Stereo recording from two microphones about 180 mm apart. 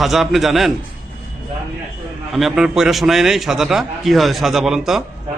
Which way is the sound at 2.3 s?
Centre (ahead or behind).